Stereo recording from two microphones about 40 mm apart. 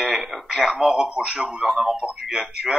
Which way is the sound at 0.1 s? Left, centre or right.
Centre.